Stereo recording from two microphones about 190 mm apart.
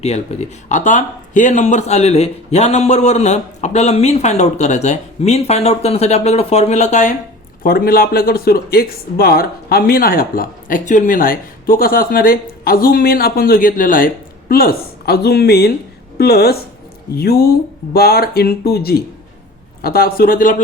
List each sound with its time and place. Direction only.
0.0 s speech: 35° left (ahead or behind)
7.6 s a woman's voice: 50° left (ahead or behind)